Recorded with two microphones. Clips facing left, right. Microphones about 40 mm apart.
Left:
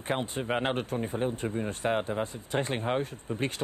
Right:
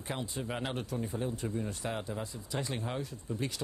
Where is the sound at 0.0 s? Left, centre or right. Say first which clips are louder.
Left 7 dB; left.